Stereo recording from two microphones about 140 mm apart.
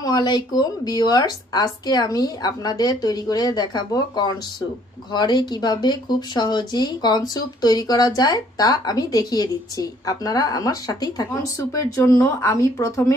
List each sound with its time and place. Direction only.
0.0 s speech: 30° left (ahead or behind)